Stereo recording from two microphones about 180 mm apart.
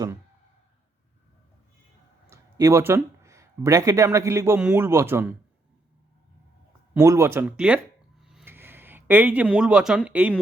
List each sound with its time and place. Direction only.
2.3 s speech: 15° right (ahead or behind)
6.9 s speech: 15° right (ahead or behind)
8.2 s a sound: centre (ahead or behind)
8.4 s speech: 10° right (ahead or behind)